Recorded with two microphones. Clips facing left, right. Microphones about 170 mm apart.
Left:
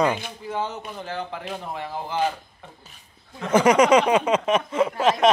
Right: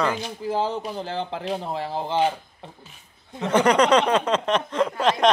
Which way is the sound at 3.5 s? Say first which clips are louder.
Left 2 dB; 10° left (ahead or behind).